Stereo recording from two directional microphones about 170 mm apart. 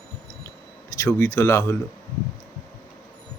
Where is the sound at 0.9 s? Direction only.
20° left (ahead or behind).